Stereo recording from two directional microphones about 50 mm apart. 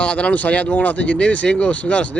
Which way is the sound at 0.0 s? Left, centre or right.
Left.